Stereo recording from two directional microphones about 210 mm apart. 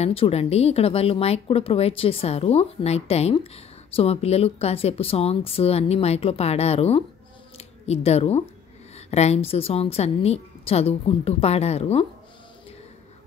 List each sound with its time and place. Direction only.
0.0 s speech: 30° left (ahead or behind)